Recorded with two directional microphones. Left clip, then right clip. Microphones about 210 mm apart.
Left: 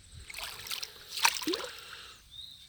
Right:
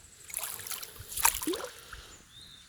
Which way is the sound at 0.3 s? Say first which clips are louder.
Left 1 dB; 5° right (ahead or behind).